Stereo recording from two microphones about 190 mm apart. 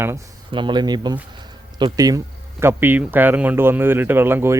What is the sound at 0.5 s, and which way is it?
Speech, 25° right (ahead or behind).